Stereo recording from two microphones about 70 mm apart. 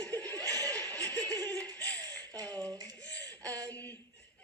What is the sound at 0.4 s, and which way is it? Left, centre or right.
Chuckle, right.